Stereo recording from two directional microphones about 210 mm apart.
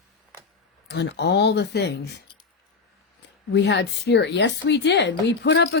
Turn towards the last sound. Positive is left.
turn(degrees=55)  # may be behind; listen again after turning